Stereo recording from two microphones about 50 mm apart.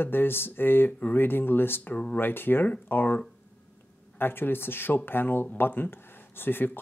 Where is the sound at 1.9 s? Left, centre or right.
Left.